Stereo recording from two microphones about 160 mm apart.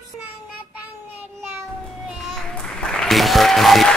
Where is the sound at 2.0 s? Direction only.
Centre (ahead or behind).